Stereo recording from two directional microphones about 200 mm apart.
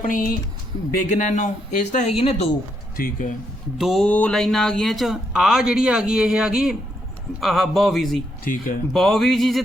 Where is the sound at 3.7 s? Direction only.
Centre (ahead or behind).